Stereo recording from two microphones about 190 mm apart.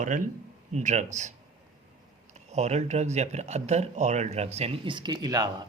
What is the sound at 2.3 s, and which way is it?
Speech, 35° right (ahead or behind).